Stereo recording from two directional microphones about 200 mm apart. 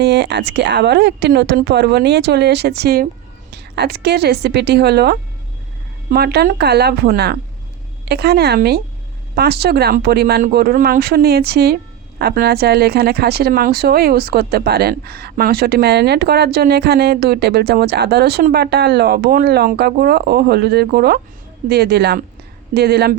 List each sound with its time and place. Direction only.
0.0 s speech: 60° right (ahead or behind)